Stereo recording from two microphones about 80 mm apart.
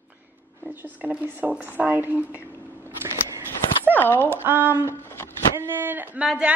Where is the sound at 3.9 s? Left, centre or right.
Left.